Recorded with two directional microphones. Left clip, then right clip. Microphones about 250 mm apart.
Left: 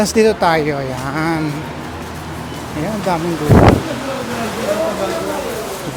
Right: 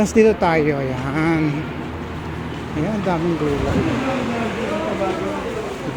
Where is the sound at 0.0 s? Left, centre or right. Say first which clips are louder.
Left 2 dB; centre.